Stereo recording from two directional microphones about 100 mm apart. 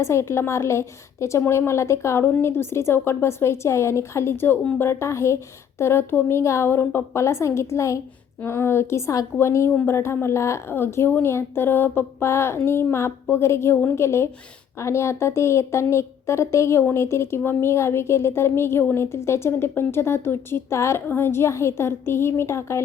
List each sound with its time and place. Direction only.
0.0 s a woman's voice: 30° left (ahead or behind)